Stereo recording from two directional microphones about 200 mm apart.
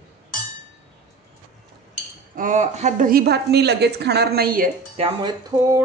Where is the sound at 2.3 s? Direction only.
40° right (ahead or behind).